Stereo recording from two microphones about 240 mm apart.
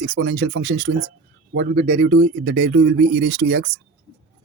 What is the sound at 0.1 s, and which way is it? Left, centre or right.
Speech, right.